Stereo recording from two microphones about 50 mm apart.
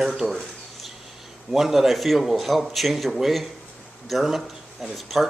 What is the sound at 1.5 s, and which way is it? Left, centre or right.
Speech, centre.